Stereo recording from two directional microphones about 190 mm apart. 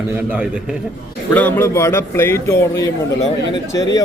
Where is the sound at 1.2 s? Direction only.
10° left (ahead or behind).